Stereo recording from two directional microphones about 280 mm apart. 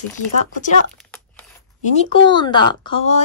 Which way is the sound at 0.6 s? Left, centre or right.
Left.